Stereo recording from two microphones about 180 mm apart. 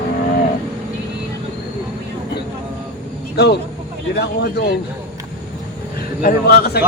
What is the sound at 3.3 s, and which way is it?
Speech, 65° left (ahead or behind).